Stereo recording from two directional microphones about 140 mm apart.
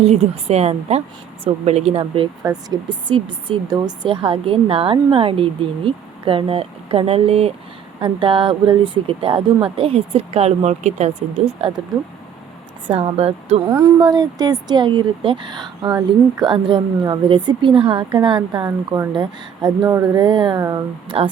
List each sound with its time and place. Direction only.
0.0 s speech: 50° right (ahead or behind)
12.9 s speech: 45° right (ahead or behind)
13.7 s speech: 25° right (ahead or behind)